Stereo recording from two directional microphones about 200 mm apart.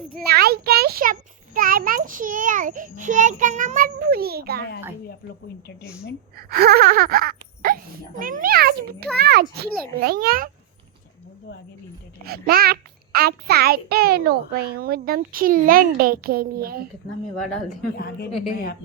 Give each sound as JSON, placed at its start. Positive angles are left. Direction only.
{"t": 0.1, "sound": "a child's voice", "side_deg": -50}
{"t": 6.3, "sound": "a child's voice", "side_deg": -50}
{"t": 12.2, "sound": "a child's voice", "side_deg": -50}
{"t": 17.9, "sound": "a woman's voice", "side_deg": 50}